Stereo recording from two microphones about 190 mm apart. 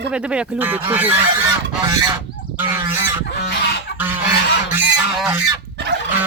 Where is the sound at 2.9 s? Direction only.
10° right (ahead or behind).